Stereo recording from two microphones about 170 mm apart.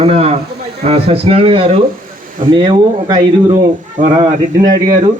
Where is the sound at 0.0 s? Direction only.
35° right (ahead or behind).